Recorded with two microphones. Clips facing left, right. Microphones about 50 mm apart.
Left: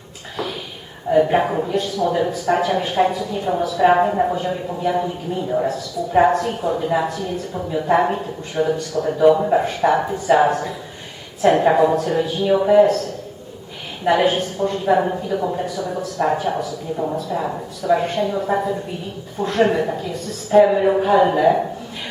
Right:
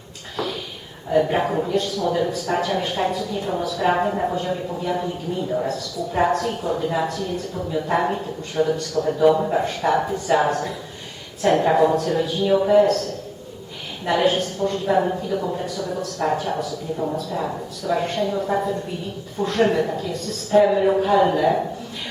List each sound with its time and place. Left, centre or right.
1.1 s a woman's voice: centre
14.0 s a woman's voice: centre